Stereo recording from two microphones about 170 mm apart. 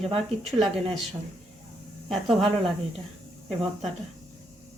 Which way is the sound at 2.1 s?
Centre (ahead or behind).